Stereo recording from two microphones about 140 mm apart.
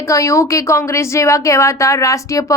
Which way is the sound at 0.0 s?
20° left (ahead or behind).